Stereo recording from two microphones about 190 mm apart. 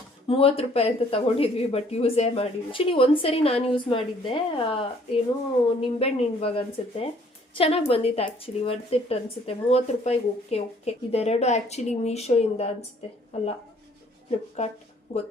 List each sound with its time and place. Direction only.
0.3 s speech: 30° left (ahead or behind)